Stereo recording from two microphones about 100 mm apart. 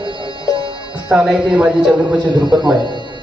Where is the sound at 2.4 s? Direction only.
50° right (ahead or behind).